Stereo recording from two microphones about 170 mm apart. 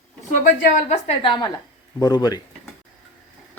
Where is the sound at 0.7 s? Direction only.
40° left (ahead or behind).